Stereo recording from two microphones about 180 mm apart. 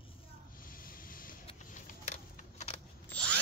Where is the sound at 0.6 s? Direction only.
50° left (ahead or behind).